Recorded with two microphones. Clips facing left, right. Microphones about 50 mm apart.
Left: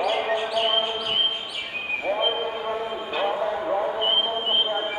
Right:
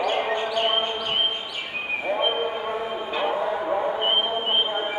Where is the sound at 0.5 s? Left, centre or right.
Centre.